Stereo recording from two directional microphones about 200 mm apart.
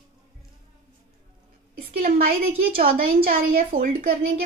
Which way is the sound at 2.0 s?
45° right (ahead or behind).